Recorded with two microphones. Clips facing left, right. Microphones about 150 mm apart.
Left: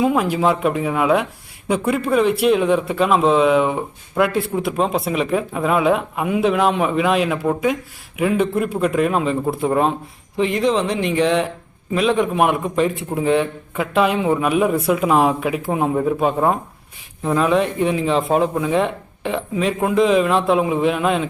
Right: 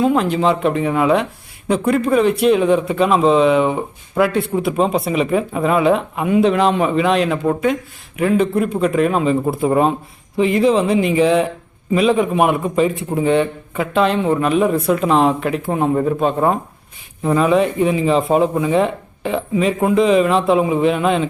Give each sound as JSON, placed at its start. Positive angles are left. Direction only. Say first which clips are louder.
{"t": 0.0, "sound": "speech", "louder": "right 2 dB", "side_deg": 10}